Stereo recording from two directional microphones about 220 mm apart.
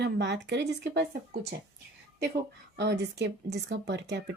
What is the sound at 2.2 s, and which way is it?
A woman's voice, 50° right (ahead or behind).